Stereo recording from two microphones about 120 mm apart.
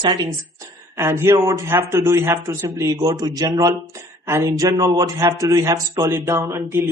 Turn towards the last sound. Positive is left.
turn(degrees=-20)  # may be behind; listen again after turning